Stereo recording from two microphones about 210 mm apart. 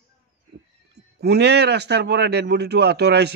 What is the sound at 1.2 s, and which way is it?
A man's voice, 55° right (ahead or behind).